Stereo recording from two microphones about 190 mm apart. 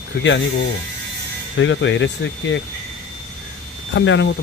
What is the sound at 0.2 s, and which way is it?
Speech, 75° left (ahead or behind).